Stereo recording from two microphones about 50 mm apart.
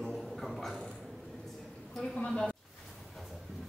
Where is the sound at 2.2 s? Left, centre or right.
Centre.